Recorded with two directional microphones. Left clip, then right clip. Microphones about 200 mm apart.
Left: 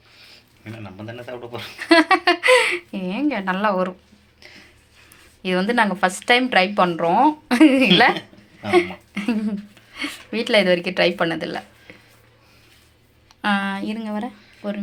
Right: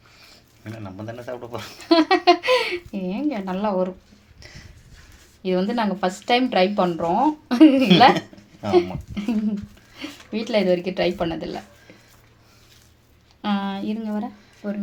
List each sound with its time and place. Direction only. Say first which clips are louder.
0.3 s speech: even; 45° right (ahead or behind)
1.9 s speech: left 1 dB; 10° left (ahead or behind)
4.4 s a sound: left 1 dB; 55° right (ahead or behind)
5.4 s speech: left 4 dB; 10° left (ahead or behind)
13.4 s speech: left 5 dB; 5° left (ahead or behind)